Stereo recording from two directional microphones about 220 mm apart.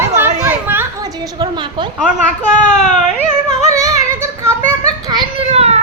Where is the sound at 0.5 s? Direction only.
10° right (ahead or behind).